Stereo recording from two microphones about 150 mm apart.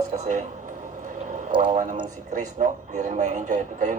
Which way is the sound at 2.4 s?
55° right (ahead or behind).